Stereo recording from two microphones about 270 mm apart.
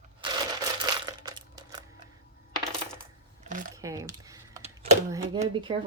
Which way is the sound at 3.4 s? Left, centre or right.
Right.